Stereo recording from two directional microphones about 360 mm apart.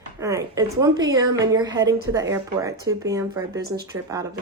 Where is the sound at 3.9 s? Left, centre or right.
Centre.